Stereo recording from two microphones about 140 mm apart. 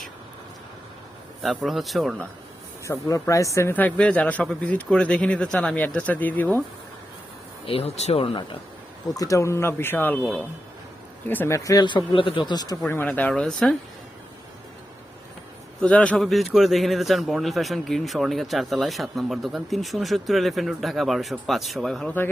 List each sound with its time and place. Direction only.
1.4 s a man's voice: centre (ahead or behind)
2.8 s a man's voice: 20° left (ahead or behind)
7.7 s speech: 45° left (ahead or behind)
8.2 s speech: 35° left (ahead or behind)
9.1 s a man's voice: 25° left (ahead or behind)
11.3 s speech: 15° left (ahead or behind)
12.9 s a man's voice: 15° left (ahead or behind)
15.8 s a man's voice: 10° left (ahead or behind)